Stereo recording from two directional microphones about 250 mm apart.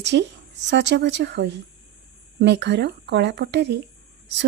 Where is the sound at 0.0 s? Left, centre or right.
Right.